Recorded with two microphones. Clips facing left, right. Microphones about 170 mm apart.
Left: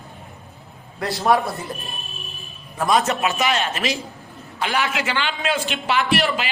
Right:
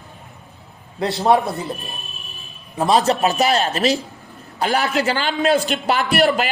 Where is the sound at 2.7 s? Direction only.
30° right (ahead or behind).